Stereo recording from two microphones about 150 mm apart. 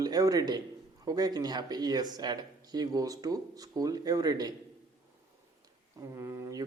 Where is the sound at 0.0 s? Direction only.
25° right (ahead or behind).